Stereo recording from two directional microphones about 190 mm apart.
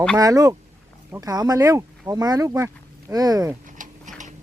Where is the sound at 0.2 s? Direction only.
20° right (ahead or behind).